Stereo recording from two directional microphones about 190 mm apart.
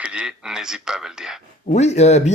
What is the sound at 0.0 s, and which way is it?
A man's voice, 5° right (ahead or behind).